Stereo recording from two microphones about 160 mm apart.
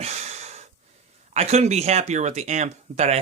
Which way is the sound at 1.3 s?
45° right (ahead or behind).